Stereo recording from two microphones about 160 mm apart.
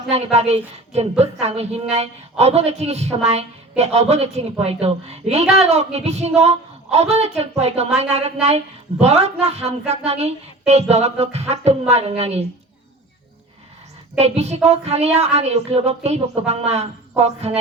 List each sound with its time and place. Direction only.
0.1 s a woman's voice: 40° right (ahead or behind)
14.2 s a woman's voice: 40° right (ahead or behind)